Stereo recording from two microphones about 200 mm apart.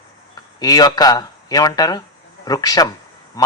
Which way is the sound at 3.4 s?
20° left (ahead or behind).